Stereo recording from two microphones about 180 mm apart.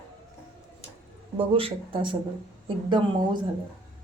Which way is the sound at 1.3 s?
30° right (ahead or behind).